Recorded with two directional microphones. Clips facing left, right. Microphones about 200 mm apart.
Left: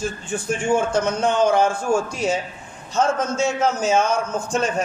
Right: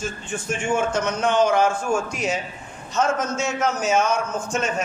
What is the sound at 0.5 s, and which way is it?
A man's voice, 35° left (ahead or behind).